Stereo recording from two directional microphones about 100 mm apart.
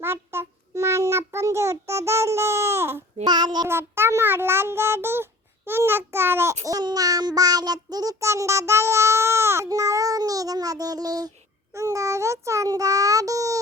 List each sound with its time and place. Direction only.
0.0 s child singing: 25° right (ahead or behind)
3.2 s child singing: 45° right (ahead or behind)
3.7 s child singing: 25° right (ahead or behind)